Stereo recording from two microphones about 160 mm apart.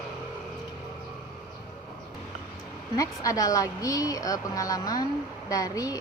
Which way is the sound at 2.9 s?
20° left (ahead or behind).